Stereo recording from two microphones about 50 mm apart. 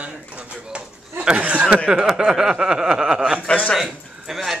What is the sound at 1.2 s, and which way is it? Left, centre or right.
Speech, right.